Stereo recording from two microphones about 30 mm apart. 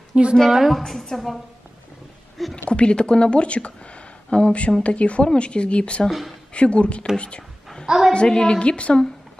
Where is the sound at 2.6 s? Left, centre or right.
Left.